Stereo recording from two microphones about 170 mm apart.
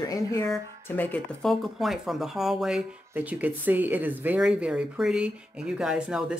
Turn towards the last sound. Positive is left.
turn(degrees=-5)  # may be behind; listen again after turning